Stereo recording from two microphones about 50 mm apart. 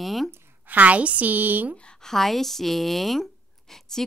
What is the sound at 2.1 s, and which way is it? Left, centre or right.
Speech, centre.